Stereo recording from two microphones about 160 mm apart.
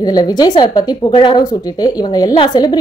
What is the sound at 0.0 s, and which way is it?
Speech, 25° left (ahead or behind).